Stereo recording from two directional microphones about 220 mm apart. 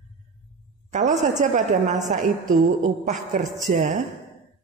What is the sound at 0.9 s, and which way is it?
Speech, 30° right (ahead or behind).